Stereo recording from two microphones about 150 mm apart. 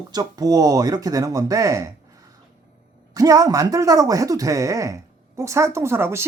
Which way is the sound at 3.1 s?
25° right (ahead or behind).